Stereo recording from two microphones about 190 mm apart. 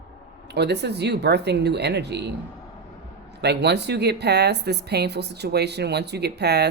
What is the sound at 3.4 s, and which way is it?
Speech, 60° right (ahead or behind).